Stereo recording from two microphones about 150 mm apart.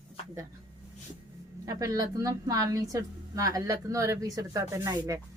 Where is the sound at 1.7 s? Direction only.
25° right (ahead or behind).